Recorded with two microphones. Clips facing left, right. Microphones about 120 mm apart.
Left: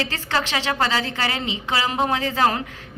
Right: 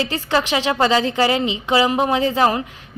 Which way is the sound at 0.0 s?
15° right (ahead or behind).